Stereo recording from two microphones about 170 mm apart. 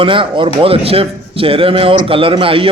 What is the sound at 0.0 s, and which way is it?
A man's voice, 30° right (ahead or behind).